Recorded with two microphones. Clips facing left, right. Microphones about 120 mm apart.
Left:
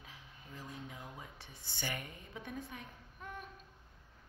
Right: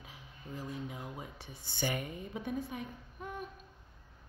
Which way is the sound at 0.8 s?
10° right (ahead or behind).